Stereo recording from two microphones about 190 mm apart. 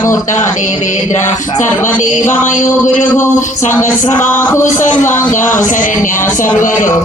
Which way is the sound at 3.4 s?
40° left (ahead or behind).